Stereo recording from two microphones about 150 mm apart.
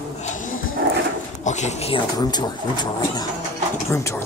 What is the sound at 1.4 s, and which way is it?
Speech, 50° left (ahead or behind).